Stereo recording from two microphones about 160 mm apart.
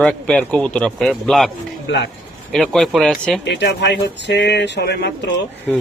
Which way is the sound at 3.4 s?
90° left.